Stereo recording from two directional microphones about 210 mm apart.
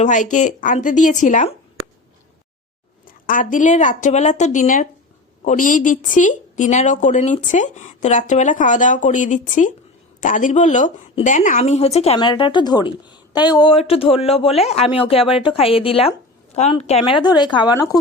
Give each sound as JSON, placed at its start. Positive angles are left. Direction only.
{"t": 0.0, "sound": "a woman's voice", "side_deg": 35}
{"t": 3.2, "sound": "a woman's voice", "side_deg": 40}